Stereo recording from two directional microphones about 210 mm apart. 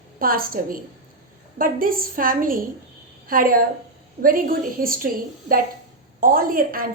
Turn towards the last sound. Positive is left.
turn(degrees=-40)  # may be behind; listen again after turning